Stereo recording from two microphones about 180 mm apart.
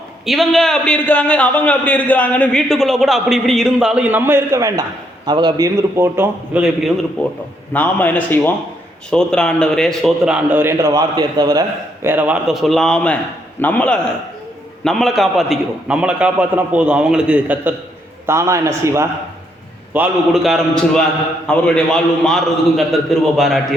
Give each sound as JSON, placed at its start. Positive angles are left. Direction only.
{"t": 0.3, "sound": "a man's voice", "side_deg": 0}
{"t": 7.2, "sound": "a man's voice", "side_deg": 10}
{"t": 12.0, "sound": "a man's voice", "side_deg": -10}
{"t": 19.9, "sound": "a man's voice", "side_deg": -5}